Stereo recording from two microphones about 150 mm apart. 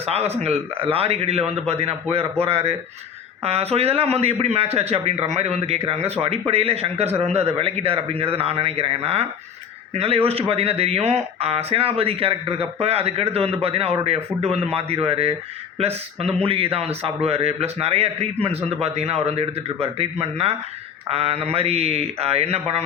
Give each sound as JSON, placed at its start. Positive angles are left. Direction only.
{"t": 0.0, "sound": "a man's voice", "side_deg": -45}
{"t": 3.4, "sound": "a man's voice", "side_deg": -45}